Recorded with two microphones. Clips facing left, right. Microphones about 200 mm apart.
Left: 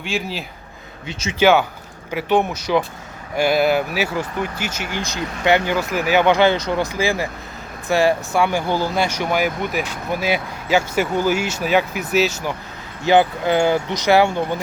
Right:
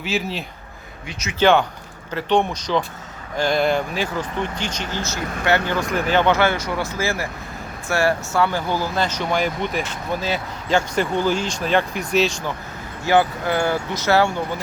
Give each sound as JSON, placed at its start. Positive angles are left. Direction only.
{"t": 0.0, "sound": "speech", "side_deg": 0}
{"t": 1.0, "sound": "speech", "side_deg": 25}
{"t": 1.4, "sound": "speech", "side_deg": 5}
{"t": 13.1, "sound": "speech", "side_deg": 20}